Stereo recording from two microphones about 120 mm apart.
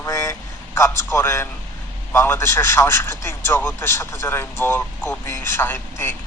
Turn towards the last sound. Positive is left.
turn(degrees=15)  # may be behind; listen again after turning